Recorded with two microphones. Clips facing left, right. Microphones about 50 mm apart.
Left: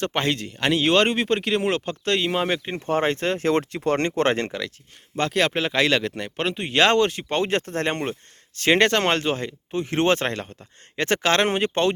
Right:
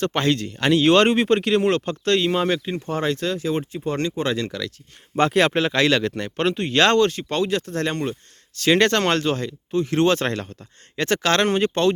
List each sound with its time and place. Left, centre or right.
0.0 s speech: centre
2.6 s speech: left
3.4 s speech: left
4.3 s speech: left
5.3 s speech: centre
5.5 s speech: centre
7.4 s speech: left
8.8 s speech: centre; by 10.2 s left
10.2 s speech: centre